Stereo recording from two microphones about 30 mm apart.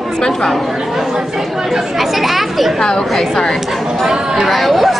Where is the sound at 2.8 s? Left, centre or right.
Centre.